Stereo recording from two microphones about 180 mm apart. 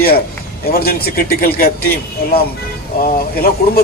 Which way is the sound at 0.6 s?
55° left (ahead or behind).